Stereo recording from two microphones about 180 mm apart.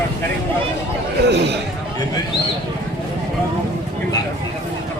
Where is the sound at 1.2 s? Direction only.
70° right (ahead or behind).